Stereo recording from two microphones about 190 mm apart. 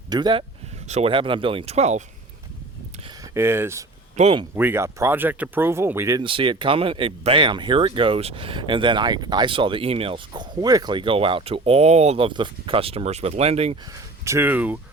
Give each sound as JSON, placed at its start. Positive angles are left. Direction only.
{"t": 0.1, "sound": "speech", "side_deg": -20}
{"t": 0.9, "sound": "speech", "side_deg": -35}
{"t": 3.3, "sound": "speech", "side_deg": -10}
{"t": 4.2, "sound": "speech", "side_deg": -30}
{"t": 4.5, "sound": "speech", "side_deg": -10}
{"t": 6.2, "sound": "speech", "side_deg": -25}
{"t": 14.3, "sound": "speech", "side_deg": -10}